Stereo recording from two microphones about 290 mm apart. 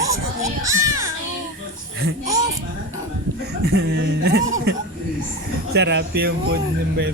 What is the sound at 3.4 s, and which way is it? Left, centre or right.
Speech, right.